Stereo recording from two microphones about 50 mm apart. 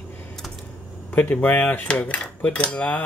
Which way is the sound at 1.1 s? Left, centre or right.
Left.